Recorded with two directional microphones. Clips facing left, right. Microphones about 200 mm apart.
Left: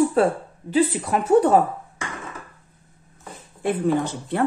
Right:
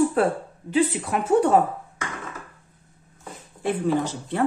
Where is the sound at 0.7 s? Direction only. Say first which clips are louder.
Left 2 dB; 35° left (ahead or behind).